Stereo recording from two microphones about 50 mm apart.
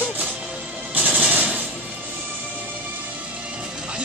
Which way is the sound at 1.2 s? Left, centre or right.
Right.